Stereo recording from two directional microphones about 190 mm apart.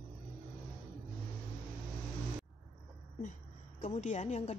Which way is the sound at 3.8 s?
35° left (ahead or behind).